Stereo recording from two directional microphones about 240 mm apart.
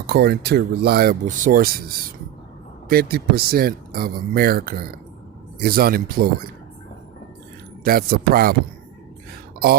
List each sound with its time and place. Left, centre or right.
0.1 s speech: right
7.9 s speech: right